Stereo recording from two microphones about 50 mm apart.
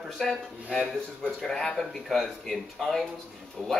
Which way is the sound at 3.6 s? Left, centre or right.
Centre.